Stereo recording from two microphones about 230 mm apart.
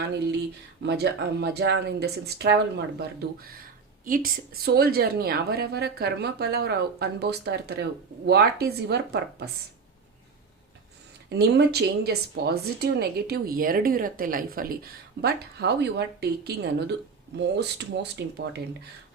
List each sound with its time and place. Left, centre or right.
0.0 s a woman's voice: right
11.3 s a woman's voice: right